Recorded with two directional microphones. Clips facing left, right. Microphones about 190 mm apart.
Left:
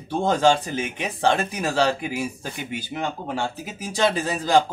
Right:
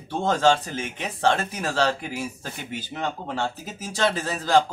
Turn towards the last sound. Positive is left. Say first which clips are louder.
# left 1 dB
turn(degrees=15)  # may be behind; listen again after turning